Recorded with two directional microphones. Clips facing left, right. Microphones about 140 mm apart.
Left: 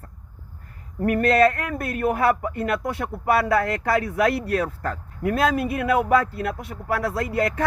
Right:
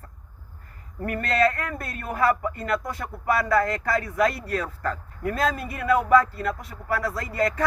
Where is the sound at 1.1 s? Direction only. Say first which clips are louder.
Left 5 dB; 60° left (ahead or behind).